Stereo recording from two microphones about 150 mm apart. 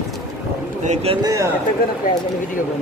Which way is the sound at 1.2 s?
20° right (ahead or behind).